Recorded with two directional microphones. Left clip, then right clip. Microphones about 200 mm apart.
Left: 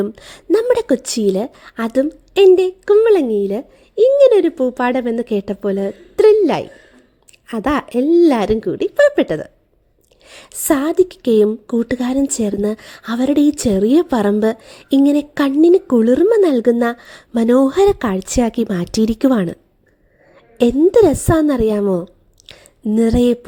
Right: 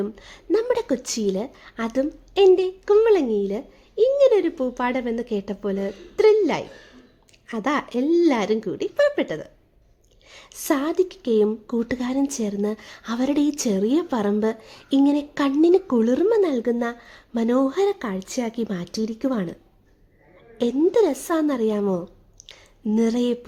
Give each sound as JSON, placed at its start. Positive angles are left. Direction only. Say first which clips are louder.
{"t": 0.0, "sound": "a woman's voice", "louder": "left 7 dB", "side_deg": 30}
{"t": 20.7, "sound": "a woman's voice", "louder": "left 7 dB", "side_deg": 25}